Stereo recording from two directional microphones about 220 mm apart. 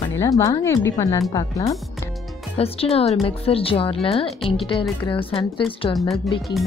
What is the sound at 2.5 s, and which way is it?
A woman's voice, 25° left (ahead or behind).